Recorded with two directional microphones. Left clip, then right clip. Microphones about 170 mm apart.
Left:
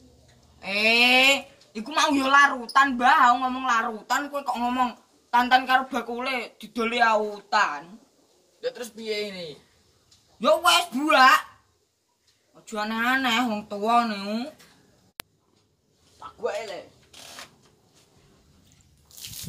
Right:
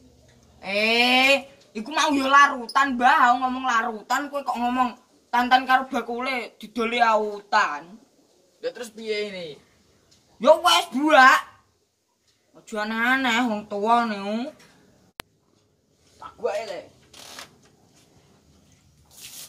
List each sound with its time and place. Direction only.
0.6 s speech: 10° left (ahead or behind)
8.5 s a man's voice: 5° right (ahead or behind)
10.4 s speech: 10° left (ahead or behind)
12.6 s speech: 15° left (ahead or behind)
15.2 s a sound: centre (ahead or behind)
16.2 s a man's voice: centre (ahead or behind)